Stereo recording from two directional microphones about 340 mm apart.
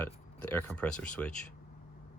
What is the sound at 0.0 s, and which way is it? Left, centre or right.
Speech, centre.